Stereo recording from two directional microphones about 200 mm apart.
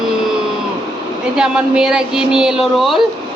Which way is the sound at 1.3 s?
5° right (ahead or behind).